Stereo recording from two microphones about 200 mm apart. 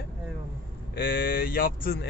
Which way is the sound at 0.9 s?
45° left (ahead or behind).